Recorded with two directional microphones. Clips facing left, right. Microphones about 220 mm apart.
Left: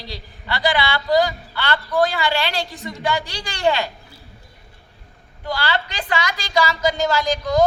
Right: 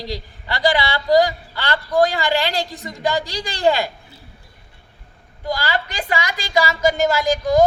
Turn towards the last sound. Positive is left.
turn(degrees=-15)  # may be behind; listen again after turning